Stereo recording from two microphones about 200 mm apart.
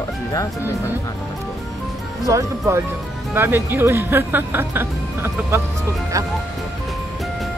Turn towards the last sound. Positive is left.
turn(degrees=-15)  # may be behind; listen again after turning